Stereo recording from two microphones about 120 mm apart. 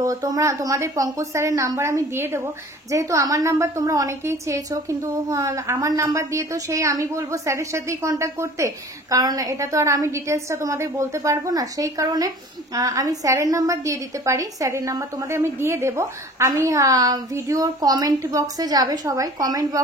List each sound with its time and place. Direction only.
0.0 s a woman's voice: 30° right (ahead or behind)